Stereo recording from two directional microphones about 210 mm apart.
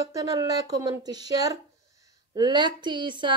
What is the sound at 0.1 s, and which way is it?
Speech, 15° right (ahead or behind).